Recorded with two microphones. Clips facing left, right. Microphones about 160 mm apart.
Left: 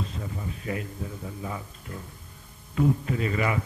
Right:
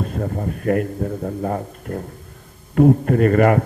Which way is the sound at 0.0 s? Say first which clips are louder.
Right 11 dB; 55° right (ahead or behind).